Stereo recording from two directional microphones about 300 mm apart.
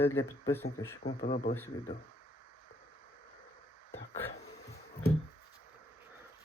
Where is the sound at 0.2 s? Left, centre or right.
Centre.